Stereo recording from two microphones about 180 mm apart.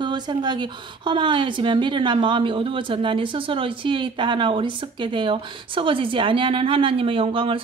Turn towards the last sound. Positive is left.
turn(degrees=-30)  # may be behind; listen again after turning